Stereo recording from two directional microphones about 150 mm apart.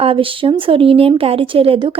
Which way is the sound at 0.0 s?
35° right (ahead or behind).